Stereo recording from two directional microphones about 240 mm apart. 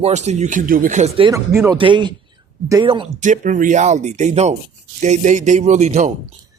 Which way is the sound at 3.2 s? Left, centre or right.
Right.